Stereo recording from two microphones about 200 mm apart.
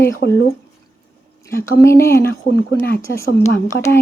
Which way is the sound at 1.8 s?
15° left (ahead or behind).